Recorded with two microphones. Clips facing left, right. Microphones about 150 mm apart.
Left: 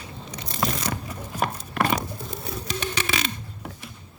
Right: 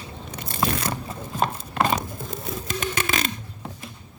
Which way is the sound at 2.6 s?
50° right (ahead or behind).